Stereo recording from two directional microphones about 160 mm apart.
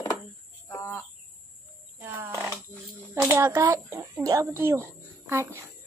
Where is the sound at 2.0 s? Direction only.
15° right (ahead or behind).